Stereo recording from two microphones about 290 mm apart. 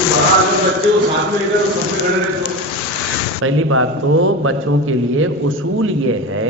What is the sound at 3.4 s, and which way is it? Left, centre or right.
A man's voice, right.